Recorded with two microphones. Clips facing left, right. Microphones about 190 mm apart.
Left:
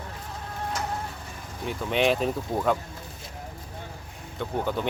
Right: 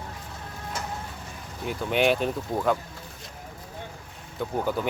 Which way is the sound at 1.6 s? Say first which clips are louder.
Right 1 dB; centre (ahead or behind).